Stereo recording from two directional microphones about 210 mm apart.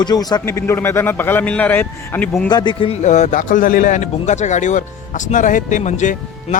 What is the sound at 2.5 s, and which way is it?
A man's voice, 20° left (ahead or behind).